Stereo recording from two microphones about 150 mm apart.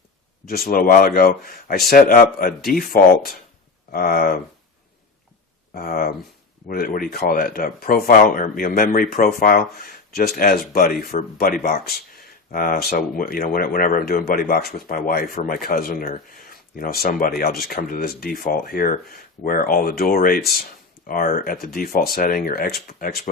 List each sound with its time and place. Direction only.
0.4 s speech: 80° left
5.7 s speech: 75° left (ahead or behind)